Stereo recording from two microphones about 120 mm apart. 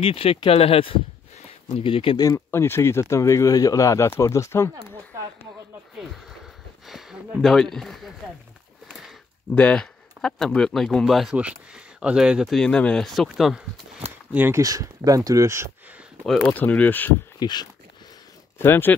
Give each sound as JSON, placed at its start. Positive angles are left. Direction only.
{"t": 0.0, "sound": "speech", "side_deg": 50}
{"t": 1.4, "sound": "a sound", "side_deg": 50}
{"t": 2.1, "sound": "speech", "side_deg": 25}
{"t": 6.9, "sound": "speech", "side_deg": 0}
{"t": 8.8, "sound": "a sound", "side_deg": 0}
{"t": 9.6, "sound": "speech", "side_deg": 10}
{"t": 14.3, "sound": "speech", "side_deg": -15}
{"t": 14.6, "sound": "speech", "side_deg": -30}
{"t": 16.4, "sound": "speech", "side_deg": 10}
{"t": 17.4, "sound": "speech", "side_deg": 35}
{"t": 18.6, "sound": "speech", "side_deg": 15}